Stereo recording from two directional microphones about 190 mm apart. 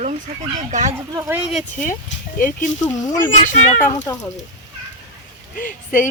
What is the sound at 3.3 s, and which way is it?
Speech, 40° left (ahead or behind).